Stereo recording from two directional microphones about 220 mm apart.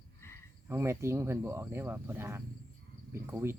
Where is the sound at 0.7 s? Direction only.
10° right (ahead or behind).